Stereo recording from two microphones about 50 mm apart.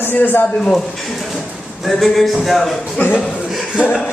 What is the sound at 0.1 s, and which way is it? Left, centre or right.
Speech, left.